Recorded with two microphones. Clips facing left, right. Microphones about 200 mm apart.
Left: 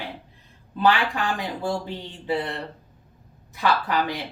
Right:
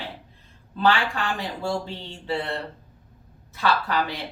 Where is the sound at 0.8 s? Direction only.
15° left (ahead or behind).